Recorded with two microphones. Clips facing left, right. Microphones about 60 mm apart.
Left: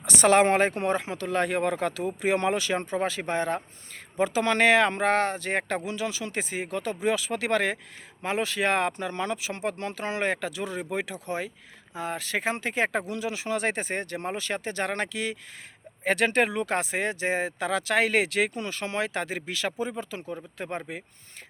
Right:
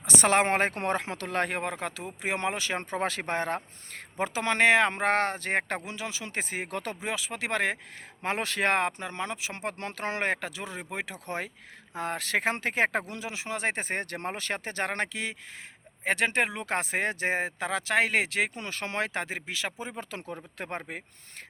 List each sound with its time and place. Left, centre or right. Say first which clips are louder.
0.0 s speech: left 4 dB; right
0.7 s speech: left 3 dB; right
1.6 s speech: left 7 dB; right
2.9 s speech: left 2 dB; right
4.4 s speech: left 1 dB; right
7.0 s speech: left 6 dB; right
8.2 s speech: left 2 dB; right
8.7 s speech: left 2 dB; right
10.3 s speech: left 4 dB; right
11.3 s speech: left 3 dB; right
13.8 s speech: left 1 dB; right
19.5 s speech: left 5 dB; right
20.1 s speech: left 2 dB; right
20.6 s speech: left 2 dB; right